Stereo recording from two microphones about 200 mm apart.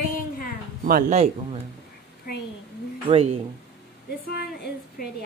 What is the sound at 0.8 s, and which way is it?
Speech, 45° right (ahead or behind).